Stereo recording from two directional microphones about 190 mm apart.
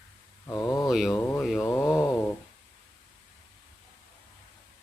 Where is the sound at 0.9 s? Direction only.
Centre (ahead or behind).